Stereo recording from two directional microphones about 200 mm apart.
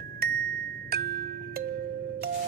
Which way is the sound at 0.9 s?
55° right (ahead or behind).